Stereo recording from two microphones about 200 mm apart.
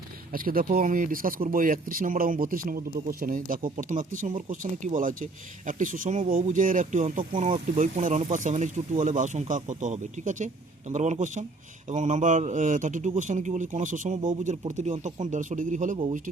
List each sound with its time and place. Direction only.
0.3 s speech: 45° right (ahead or behind)